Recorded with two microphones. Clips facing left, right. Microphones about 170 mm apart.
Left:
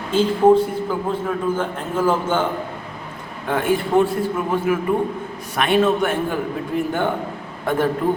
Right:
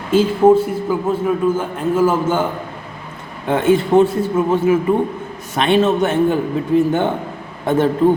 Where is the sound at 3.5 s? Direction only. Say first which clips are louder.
Right 5 dB; 25° right (ahead or behind).